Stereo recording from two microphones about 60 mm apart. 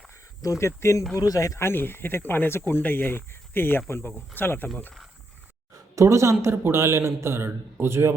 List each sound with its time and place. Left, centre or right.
0.6 s speech: left
1.3 s speech: left
1.5 s speech: left
5.7 s a sound: right
6.4 s a man's voice: right